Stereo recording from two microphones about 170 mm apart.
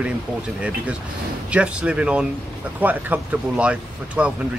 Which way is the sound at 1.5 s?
5° right (ahead or behind).